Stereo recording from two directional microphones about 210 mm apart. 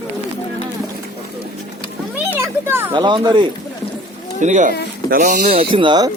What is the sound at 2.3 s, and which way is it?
Children playing, 10° right (ahead or behind).